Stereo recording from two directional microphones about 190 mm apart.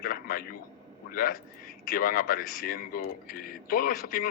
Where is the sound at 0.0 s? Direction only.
50° left (ahead or behind).